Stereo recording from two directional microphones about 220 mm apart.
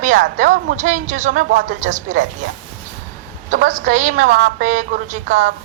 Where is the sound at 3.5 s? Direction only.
35° right (ahead or behind).